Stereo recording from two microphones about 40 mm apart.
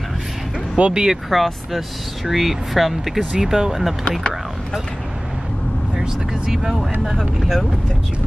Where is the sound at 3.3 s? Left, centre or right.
Centre.